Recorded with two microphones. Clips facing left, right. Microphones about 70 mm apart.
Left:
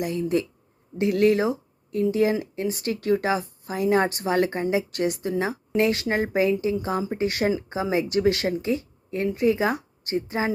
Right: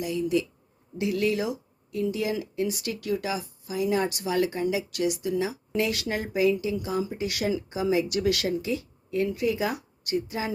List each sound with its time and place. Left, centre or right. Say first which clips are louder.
0.0 s speech: left 2 dB; left